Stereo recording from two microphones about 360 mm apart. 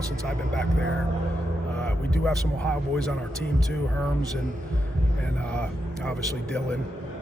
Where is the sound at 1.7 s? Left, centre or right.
Centre.